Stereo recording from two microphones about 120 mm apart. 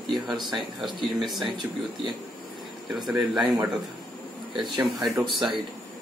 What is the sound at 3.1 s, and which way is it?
Speech, centre (ahead or behind).